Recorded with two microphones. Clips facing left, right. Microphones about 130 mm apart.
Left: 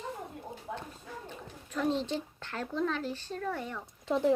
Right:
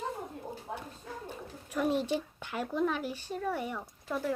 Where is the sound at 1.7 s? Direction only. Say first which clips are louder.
Right 1 dB; 10° right (ahead or behind).